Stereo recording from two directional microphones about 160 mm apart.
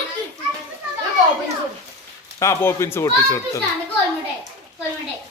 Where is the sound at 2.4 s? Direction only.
15° left (ahead or behind).